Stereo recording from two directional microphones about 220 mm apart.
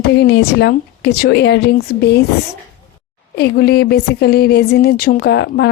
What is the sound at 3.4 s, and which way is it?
Speech, 45° left (ahead or behind).